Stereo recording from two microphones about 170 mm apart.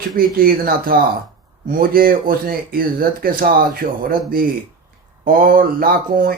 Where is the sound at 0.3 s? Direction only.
55° right (ahead or behind).